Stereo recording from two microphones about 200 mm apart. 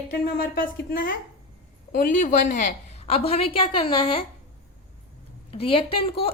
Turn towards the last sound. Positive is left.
turn(degrees=30)  # may be behind; listen again after turning